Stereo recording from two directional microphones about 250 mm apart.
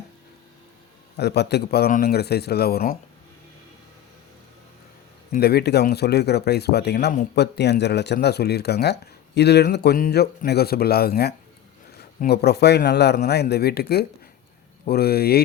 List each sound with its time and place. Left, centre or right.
1.1 s speech: left
5.3 s speech: left